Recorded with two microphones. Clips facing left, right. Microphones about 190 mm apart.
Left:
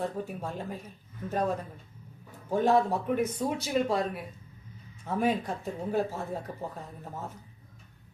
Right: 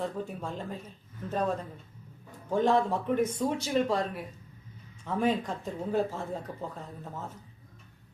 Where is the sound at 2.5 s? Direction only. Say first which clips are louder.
Left 1 dB; 10° left (ahead or behind).